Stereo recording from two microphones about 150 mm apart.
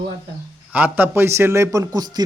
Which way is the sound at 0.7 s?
10° right (ahead or behind).